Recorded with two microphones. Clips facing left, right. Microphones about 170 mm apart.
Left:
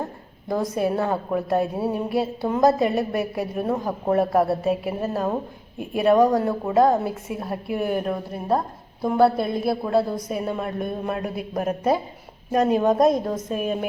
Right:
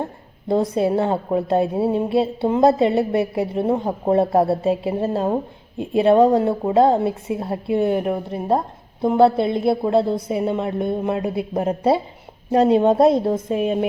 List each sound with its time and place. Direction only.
0.0 s a woman's voice: 25° right (ahead or behind)